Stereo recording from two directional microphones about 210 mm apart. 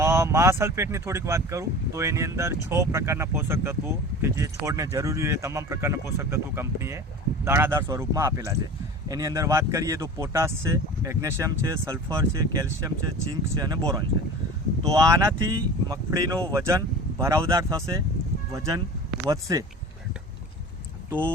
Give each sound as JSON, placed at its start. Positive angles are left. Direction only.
{"t": 0.0, "sound": "speech", "side_deg": -15}